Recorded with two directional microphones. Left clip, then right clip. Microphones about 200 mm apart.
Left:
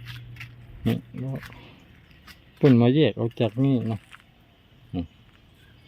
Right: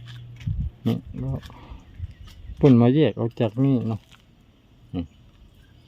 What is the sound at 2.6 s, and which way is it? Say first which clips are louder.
Speech: right 1 dB; 10° right (ahead or behind).